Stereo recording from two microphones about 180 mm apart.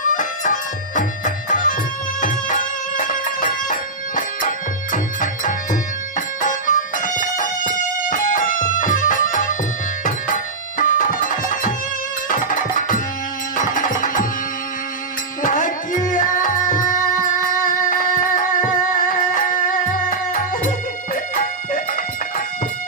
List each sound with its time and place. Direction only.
0.0 s music: 45° left (ahead or behind)
15.4 s tabla: 45° left (ahead or behind)